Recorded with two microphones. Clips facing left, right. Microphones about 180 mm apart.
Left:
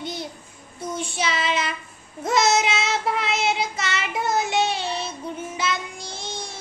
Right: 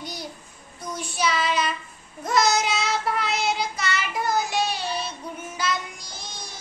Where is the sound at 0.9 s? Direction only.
25° left (ahead or behind).